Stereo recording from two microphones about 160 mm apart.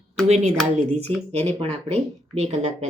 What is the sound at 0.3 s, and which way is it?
Speech, 45° right (ahead or behind).